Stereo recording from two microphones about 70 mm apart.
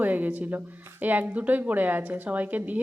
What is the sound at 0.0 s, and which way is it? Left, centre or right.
A woman's voice, right.